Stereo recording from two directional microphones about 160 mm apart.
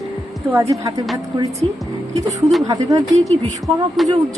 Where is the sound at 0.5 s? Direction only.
15° right (ahead or behind).